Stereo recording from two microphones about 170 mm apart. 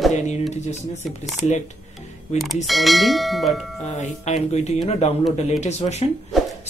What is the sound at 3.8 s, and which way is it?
Speech, 40° left (ahead or behind).